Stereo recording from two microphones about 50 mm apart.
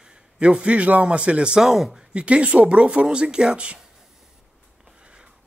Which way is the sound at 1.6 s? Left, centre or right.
Centre.